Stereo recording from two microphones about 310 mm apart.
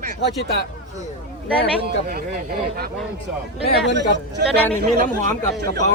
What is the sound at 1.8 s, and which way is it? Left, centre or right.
Speech, right.